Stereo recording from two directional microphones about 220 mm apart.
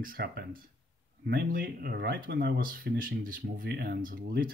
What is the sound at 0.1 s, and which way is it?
Speech, 45° right (ahead or behind).